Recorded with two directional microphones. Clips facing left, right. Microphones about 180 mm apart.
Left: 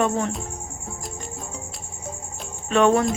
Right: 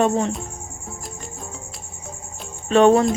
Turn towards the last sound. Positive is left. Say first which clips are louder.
# right 4 dB
turn(degrees=-30)  # may be behind; listen again after turning